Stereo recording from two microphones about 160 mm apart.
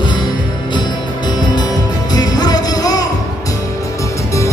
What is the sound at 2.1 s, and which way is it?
Music, 25° left (ahead or behind).